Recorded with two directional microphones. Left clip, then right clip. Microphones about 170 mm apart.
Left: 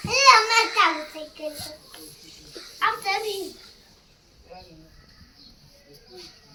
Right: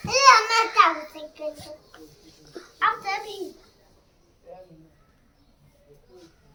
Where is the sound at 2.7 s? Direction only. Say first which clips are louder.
Even; 25° left (ahead or behind).